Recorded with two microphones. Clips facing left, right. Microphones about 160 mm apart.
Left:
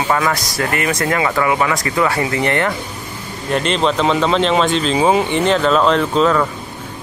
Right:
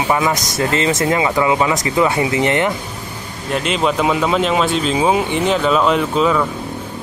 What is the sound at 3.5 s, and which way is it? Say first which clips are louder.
Speech: left 1 dB; 5° right (ahead or behind).